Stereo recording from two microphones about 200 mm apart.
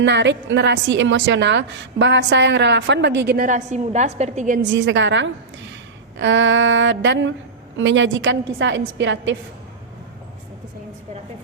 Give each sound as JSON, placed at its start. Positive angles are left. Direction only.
{"t": 0.0, "sound": "a woman's voice", "side_deg": -60}
{"t": 4.6, "sound": "a woman's voice", "side_deg": -65}